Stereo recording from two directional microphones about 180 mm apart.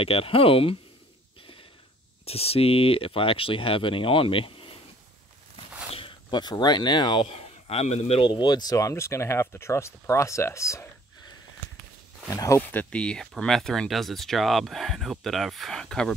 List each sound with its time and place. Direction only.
0.0 s speech: 30° left (ahead or behind)
2.2 s speech: 35° left (ahead or behind)
5.9 s speech: 30° left (ahead or behind); by 16.2 s 5° left (ahead or behind)